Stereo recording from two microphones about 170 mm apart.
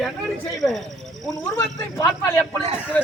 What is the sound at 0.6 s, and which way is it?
Speech, centre (ahead or behind).